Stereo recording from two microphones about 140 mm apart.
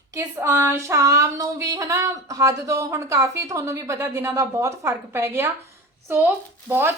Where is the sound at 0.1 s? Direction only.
20° right (ahead or behind).